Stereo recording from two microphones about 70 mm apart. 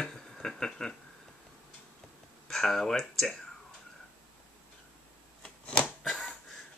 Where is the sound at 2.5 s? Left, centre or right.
Centre.